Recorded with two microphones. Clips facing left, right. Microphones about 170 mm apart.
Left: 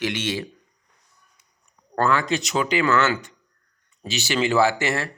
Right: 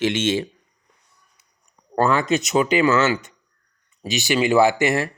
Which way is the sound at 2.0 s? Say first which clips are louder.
Right 3 dB; 20° right (ahead or behind).